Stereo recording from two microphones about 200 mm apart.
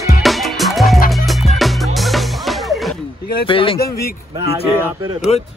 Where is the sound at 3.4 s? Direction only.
25° left (ahead or behind).